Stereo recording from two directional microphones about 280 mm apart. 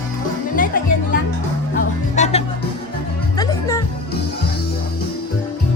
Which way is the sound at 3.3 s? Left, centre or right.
Centre.